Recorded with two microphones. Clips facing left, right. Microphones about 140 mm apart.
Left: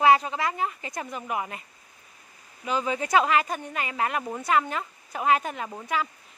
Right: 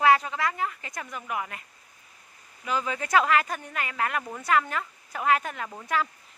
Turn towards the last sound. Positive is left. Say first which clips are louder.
# even
turn(degrees=15)  # may be behind; listen again after turning